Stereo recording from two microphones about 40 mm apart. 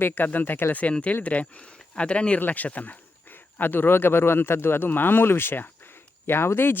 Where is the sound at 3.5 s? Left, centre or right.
Left.